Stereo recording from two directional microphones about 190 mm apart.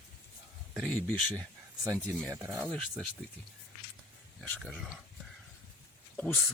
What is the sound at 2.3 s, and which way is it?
Speech, 15° right (ahead or behind).